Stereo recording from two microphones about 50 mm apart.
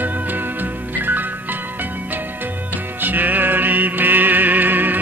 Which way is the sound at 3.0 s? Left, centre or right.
Right.